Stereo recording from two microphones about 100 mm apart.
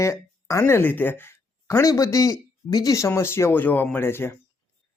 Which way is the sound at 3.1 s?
25° left (ahead or behind).